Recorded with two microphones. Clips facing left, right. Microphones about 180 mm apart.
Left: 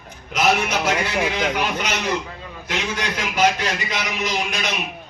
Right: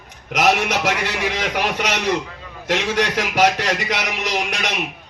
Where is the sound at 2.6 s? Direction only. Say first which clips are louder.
Right 6 dB; 75° right (ahead or behind).